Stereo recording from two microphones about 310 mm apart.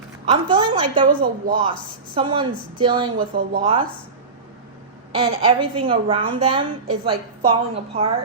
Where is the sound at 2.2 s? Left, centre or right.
Centre.